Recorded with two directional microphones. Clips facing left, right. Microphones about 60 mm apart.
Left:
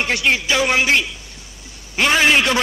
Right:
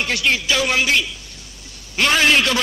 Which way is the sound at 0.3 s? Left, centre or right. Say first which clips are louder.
Left 2 dB; left.